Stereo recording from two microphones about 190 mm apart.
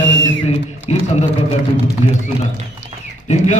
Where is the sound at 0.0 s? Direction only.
80° left.